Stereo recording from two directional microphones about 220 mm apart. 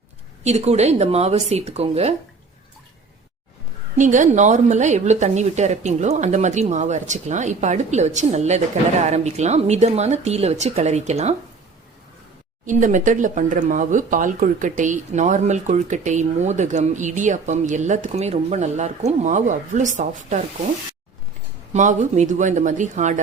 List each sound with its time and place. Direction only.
0.4 s speech: 30° right (ahead or behind)
3.9 s a woman's voice: 35° right (ahead or behind)
12.6 s a woman's voice: 35° right (ahead or behind)
21.7 s a woman's voice: 35° right (ahead or behind)